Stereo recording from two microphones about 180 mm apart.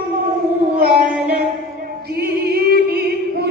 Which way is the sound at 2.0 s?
60° right (ahead or behind).